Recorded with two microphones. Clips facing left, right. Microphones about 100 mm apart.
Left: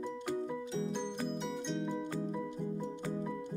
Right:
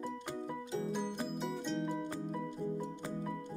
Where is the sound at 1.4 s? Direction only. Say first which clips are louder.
Even; centre (ahead or behind).